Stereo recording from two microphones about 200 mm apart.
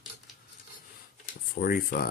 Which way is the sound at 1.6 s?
45° left (ahead or behind).